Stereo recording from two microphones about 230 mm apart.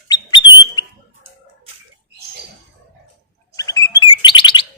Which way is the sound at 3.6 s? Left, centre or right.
Centre.